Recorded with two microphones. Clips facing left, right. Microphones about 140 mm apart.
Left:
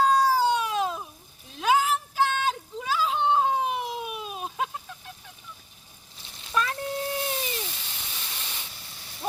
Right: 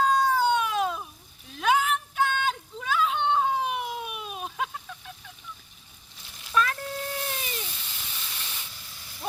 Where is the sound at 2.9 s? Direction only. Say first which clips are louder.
Left 1 dB; 35° left (ahead or behind).